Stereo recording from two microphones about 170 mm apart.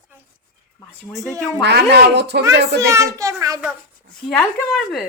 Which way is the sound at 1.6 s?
75° right (ahead or behind).